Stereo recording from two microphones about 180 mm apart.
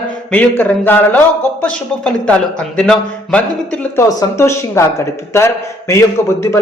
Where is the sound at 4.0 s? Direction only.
20° left (ahead or behind).